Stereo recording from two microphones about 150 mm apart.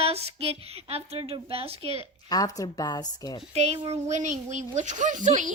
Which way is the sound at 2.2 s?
25° left (ahead or behind).